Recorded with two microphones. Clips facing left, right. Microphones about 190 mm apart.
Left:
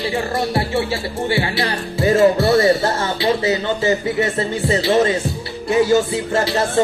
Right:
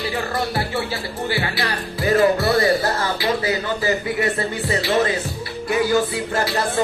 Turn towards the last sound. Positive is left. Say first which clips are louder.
# left 4 dB
turn(degrees=25)  # may be behind; listen again after turning